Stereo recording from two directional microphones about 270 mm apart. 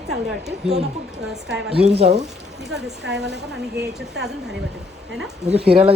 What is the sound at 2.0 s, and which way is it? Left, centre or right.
Speech, right.